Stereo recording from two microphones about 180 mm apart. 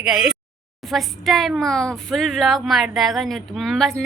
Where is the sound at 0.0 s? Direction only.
Centre (ahead or behind).